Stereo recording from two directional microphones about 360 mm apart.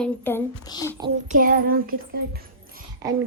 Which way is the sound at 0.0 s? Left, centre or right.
Centre.